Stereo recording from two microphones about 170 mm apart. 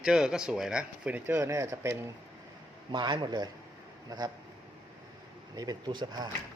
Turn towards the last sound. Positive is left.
turn(degrees=-25)  # may be behind; listen again after turning